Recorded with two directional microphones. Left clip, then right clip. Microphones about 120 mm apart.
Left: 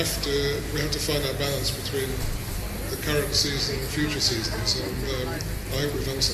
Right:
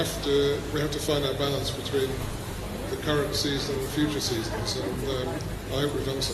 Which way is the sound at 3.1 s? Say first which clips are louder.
Left 2 dB; 20° right (ahead or behind).